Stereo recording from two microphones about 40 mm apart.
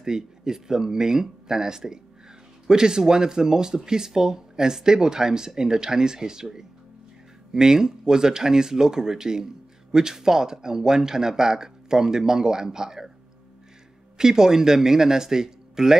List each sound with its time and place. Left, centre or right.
0.0 s speech: centre
14.1 s speech: centre